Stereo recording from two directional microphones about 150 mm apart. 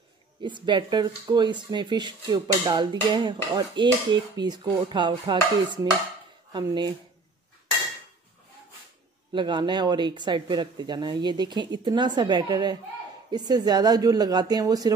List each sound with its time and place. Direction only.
0.4 s speech: 30° right (ahead or behind)
9.3 s speech: 30° right (ahead or behind)